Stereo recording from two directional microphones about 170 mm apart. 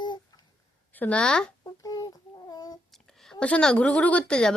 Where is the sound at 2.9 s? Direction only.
Centre (ahead or behind).